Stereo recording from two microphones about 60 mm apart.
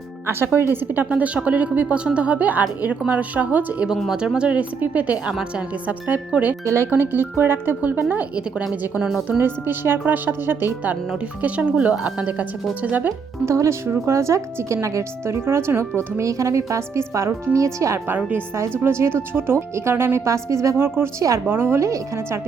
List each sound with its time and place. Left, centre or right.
0.3 s speech: right
1.1 s a woman's voice: right
3.8 s a woman's voice: centre
6.1 s a woman's voice: right
9.0 s speech: centre
9.4 s speech: right
11.4 s a woman's voice: right
13.4 s speech: right
15.4 s a woman's voice: right
18.8 s speech: right
20.7 s speech: right
21.2 s a woman's voice: right
21.4 s speech: right
21.8 s a woman's voice: right